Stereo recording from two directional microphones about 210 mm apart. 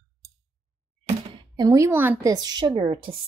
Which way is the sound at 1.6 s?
15° right (ahead or behind).